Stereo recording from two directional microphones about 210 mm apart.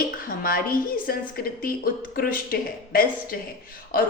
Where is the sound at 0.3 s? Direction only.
45° left (ahead or behind).